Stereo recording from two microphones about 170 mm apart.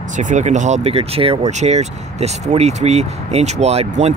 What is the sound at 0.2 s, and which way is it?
Speech, 45° right (ahead or behind).